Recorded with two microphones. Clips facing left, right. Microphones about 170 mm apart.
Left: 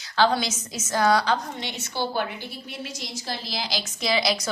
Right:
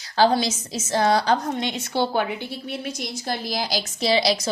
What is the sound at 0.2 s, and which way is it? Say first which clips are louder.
A woman's voice: right 3 dB; 35° right (ahead or behind).